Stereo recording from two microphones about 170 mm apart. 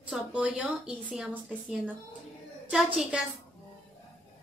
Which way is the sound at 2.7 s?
5° right (ahead or behind).